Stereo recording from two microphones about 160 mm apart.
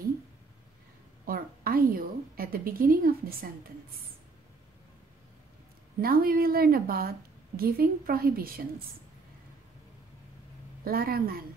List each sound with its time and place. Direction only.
1.2 s a sound: 65° right (ahead or behind)
5.9 s a woman's voice: 70° right (ahead or behind)
10.8 s a woman's voice: 70° right (ahead or behind)